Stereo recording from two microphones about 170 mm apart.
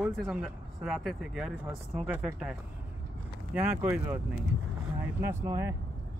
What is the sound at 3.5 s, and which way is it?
Speech, 10° right (ahead or behind).